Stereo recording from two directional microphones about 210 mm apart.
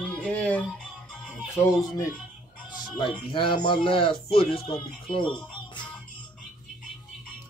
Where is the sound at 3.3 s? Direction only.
25° left (ahead or behind).